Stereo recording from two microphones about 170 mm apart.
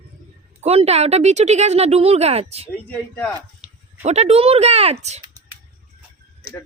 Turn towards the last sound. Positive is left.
turn(degrees=-40)  # may be behind; listen again after turning